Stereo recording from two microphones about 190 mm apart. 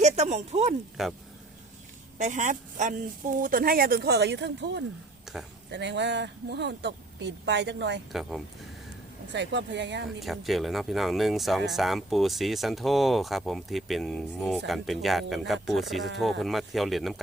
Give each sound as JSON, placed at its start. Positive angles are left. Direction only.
{"t": 0.0, "sound": "speech", "side_deg": -35}
{"t": 1.0, "sound": "speech", "side_deg": 0}
{"t": 2.1, "sound": "speech", "side_deg": -40}
{"t": 5.2, "sound": "a sound", "side_deg": 0}
{"t": 5.7, "sound": "speech", "side_deg": -65}
{"t": 8.1, "sound": "speech", "side_deg": 0}
{"t": 9.3, "sound": "speech", "side_deg": -65}
{"t": 10.2, "sound": "speech", "side_deg": 0}